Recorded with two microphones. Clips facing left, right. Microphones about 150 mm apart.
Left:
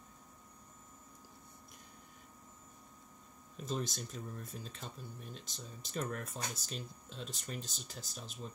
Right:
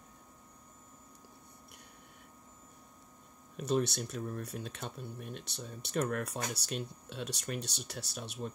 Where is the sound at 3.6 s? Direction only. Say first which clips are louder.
Right 8 dB; 70° right (ahead or behind).